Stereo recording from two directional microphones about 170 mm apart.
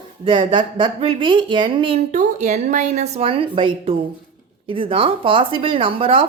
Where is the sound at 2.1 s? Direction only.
45° right (ahead or behind).